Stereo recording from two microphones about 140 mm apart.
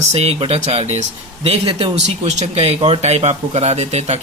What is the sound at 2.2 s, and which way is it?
Speech, 55° right (ahead or behind).